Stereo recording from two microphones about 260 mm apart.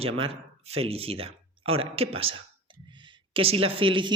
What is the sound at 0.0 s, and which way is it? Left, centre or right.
Speech, right.